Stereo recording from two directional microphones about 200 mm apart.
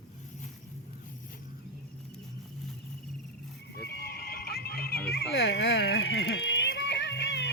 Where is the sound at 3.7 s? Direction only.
50° left (ahead or behind).